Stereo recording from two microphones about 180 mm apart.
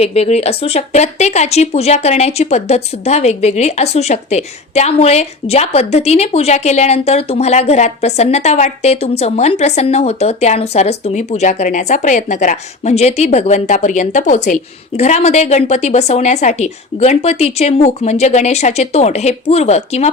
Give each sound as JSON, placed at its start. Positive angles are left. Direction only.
{"t": 0.0, "sound": "speech", "side_deg": 35}